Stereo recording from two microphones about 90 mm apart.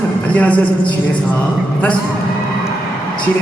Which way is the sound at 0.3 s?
20° left (ahead or behind).